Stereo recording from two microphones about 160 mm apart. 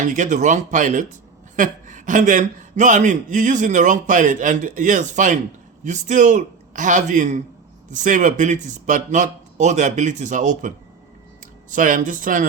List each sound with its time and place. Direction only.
0.0 s a man's voice: 50° right (ahead or behind)
11.7 s speech: 55° right (ahead or behind)